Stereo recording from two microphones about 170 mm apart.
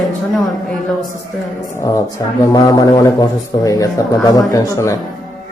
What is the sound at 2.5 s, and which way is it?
A man's voice, 20° left (ahead or behind).